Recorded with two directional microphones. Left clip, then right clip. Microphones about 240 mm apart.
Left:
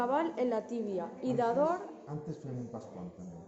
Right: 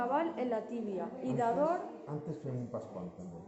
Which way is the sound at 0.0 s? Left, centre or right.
Left.